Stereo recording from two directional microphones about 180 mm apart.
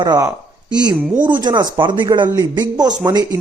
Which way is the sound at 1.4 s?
25° right (ahead or behind).